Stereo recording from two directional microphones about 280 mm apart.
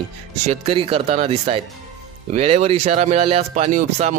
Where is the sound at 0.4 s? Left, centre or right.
Right.